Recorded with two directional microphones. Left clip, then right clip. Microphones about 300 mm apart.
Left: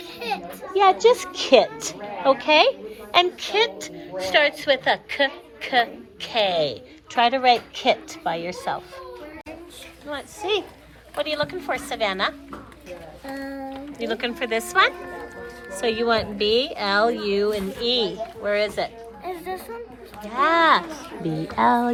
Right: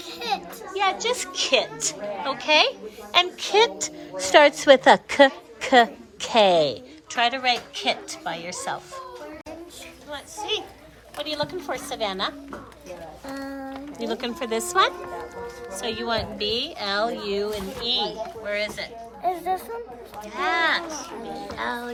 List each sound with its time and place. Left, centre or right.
0.2 s a child's voice: centre
7.1 s a woman's voice: centre
10.1 s a woman's voice: centre
14.0 s a child's voice: centre
19.2 s speech: right
20.2 s a woman's voice: centre